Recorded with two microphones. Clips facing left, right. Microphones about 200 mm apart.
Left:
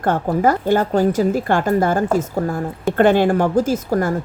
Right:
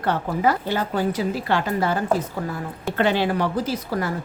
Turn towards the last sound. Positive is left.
turn(degrees=45)  # may be behind; listen again after turning